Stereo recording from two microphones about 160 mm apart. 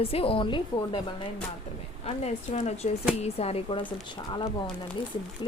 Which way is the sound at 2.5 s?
45° left (ahead or behind).